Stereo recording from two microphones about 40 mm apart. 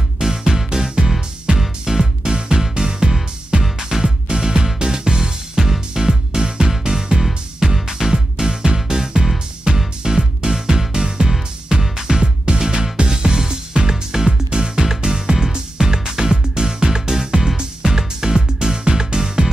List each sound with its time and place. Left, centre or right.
0.2 s music: centre